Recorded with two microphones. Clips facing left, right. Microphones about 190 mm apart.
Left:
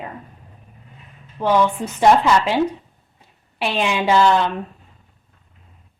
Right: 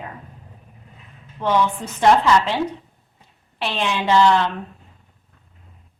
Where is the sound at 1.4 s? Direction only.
10° left (ahead or behind).